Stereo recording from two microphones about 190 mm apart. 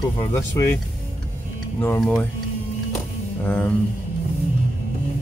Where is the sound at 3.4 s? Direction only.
5° left (ahead or behind).